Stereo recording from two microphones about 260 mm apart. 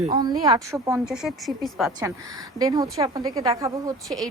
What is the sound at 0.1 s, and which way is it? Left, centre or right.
A woman's voice, centre.